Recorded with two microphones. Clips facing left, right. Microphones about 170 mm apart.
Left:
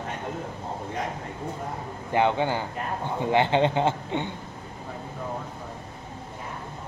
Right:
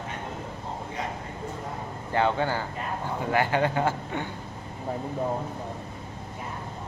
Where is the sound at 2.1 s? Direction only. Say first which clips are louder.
Left 2 dB; 20° left (ahead or behind).